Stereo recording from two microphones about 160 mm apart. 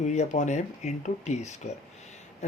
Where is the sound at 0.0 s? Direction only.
45° left (ahead or behind).